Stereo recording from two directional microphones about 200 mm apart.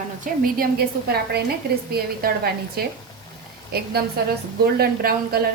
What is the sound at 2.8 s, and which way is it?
Speech, 50° right (ahead or behind).